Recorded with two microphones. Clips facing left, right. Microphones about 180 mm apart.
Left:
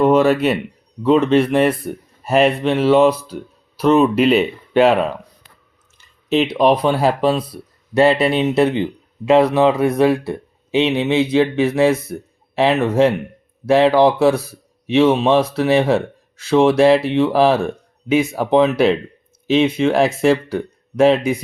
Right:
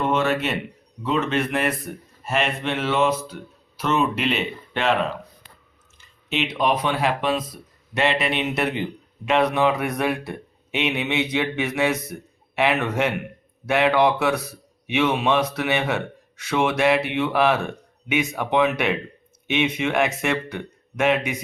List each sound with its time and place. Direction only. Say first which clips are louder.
0.0 s speech: left 9 dB; 35° left (ahead or behind)
6.2 s speech: left 8 dB; 35° left (ahead or behind)